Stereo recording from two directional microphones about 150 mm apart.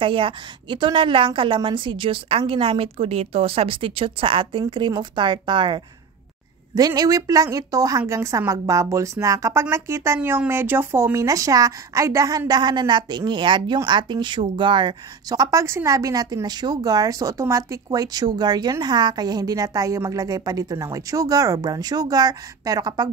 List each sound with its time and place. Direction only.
0.0 s a woman's voice: 35° right (ahead or behind)